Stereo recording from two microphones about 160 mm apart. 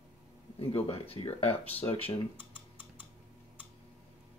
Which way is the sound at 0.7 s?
40° left (ahead or behind).